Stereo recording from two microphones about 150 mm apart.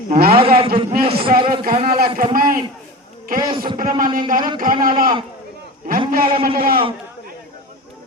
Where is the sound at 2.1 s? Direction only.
70° right (ahead or behind).